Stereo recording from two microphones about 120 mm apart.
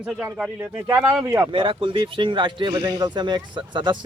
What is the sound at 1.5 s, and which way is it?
Speech, 45° right (ahead or behind).